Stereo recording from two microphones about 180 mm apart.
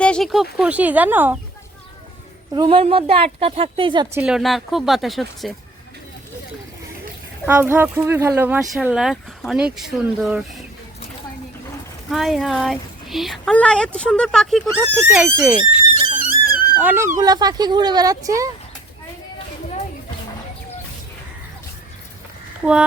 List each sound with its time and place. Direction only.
0.0 s a sound: 5° left (ahead or behind)
0.5 s speech: 10° right (ahead or behind)
2.5 s a woman's voice: 25° right (ahead or behind)
4.1 s a woman's voice: 5° right (ahead or behind)
7.4 s a woman's voice: 10° right (ahead or behind)
12.0 s a woman's voice: centre (ahead or behind)
15.0 s speech: 10° right (ahead or behind)
16.1 s a sound: 55° right (ahead or behind)
16.7 s speech: 10° right (ahead or behind)
17.2 s a woman's voice: 20° right (ahead or behind)